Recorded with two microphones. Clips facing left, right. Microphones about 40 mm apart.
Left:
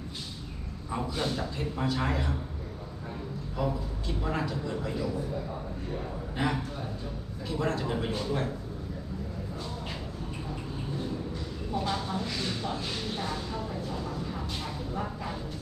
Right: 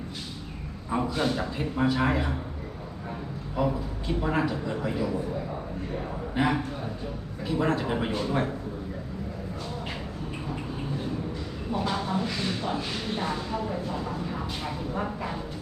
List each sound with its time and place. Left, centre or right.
0.9 s speech: centre
3.6 s speech: right
6.3 s a man's voice: centre
11.7 s speech: right